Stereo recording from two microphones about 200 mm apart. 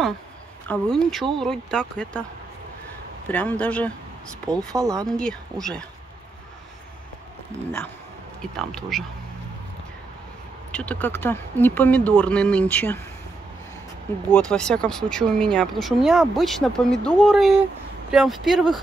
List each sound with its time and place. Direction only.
0.7 s speech: 5° left (ahead or behind)
3.3 s speech: 5° left (ahead or behind)
4.5 s speech: 15° right (ahead or behind)
5.0 s speech: 5° left (ahead or behind)
8.4 s speech: centre (ahead or behind)
10.7 s speech: 5° left (ahead or behind)
14.5 s speech: 5° left (ahead or behind)